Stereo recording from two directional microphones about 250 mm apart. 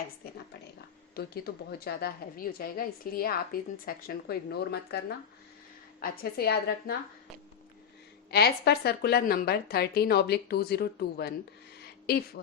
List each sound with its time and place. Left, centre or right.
1.1 s a woman's voice: left
8.3 s a woman's voice: left